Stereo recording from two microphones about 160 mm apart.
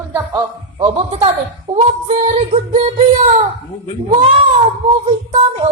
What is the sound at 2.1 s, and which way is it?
Music, 45° right (ahead or behind).